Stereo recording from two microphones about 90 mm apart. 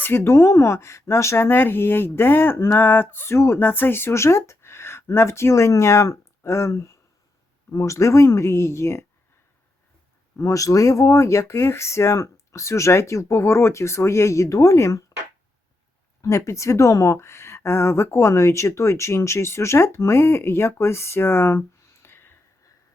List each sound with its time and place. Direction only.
0.0 s speech: 25° left (ahead or behind)
10.3 s speech: 35° left (ahead or behind)
16.2 s speech: 35° left (ahead or behind)
22.0 s a sound: 25° left (ahead or behind)